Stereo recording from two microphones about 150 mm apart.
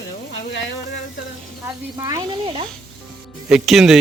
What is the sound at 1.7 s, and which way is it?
Speech, 20° right (ahead or behind).